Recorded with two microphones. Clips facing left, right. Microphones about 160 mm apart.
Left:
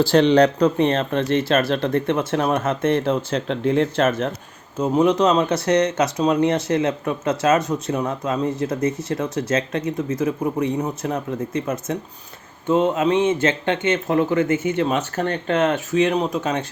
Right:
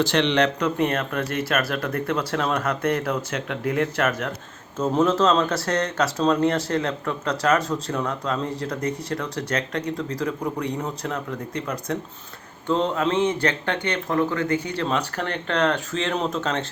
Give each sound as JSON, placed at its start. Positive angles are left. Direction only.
{"t": 0.0, "sound": "speech", "side_deg": 35}
{"t": 4.8, "sound": "speech", "side_deg": 15}